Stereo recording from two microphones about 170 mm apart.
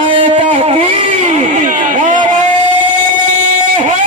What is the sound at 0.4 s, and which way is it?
Vehicle, 40° right (ahead or behind).